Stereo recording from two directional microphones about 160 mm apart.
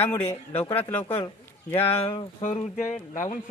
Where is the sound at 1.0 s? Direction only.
30° left (ahead or behind).